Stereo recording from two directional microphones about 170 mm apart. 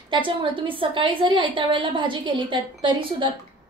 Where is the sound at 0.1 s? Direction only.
30° right (ahead or behind).